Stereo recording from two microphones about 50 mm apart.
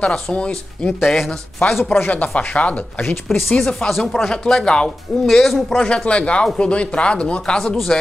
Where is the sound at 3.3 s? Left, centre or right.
Centre.